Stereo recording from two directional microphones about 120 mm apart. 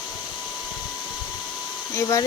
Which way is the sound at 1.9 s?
30° left (ahead or behind).